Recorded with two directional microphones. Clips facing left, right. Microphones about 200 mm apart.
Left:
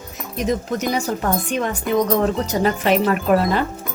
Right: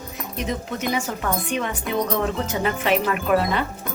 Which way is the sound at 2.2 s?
35° left (ahead or behind).